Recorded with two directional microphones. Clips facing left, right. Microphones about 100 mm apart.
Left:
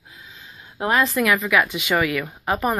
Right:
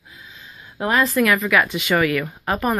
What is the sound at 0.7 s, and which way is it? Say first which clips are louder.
Speech: right 1 dB; 20° left (ahead or behind).